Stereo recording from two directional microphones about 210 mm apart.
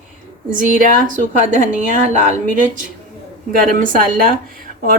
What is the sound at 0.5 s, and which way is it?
A woman's voice, 40° right (ahead or behind).